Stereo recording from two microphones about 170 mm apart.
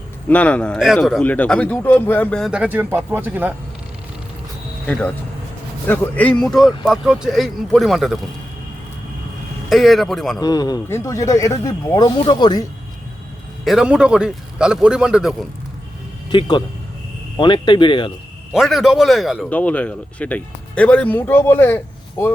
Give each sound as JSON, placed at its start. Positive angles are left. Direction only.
{"t": 0.3, "sound": "speech", "side_deg": 10}
{"t": 2.5, "sound": "speech", "side_deg": -10}
{"t": 4.9, "sound": "speech", "side_deg": 5}
{"t": 9.6, "sound": "speech", "side_deg": 0}
{"t": 10.4, "sound": "speech", "side_deg": 25}
{"t": 13.7, "sound": "speech", "side_deg": -5}
{"t": 16.3, "sound": "speech", "side_deg": 30}
{"t": 18.5, "sound": "speech", "side_deg": 0}